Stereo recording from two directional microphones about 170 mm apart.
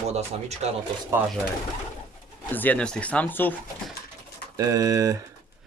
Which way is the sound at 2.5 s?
10° left (ahead or behind).